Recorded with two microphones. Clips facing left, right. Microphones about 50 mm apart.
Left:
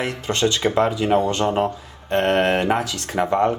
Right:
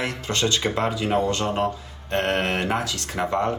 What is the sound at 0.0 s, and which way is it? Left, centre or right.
Speech, left.